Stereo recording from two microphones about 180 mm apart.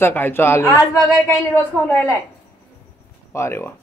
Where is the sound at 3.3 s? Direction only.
15° left (ahead or behind).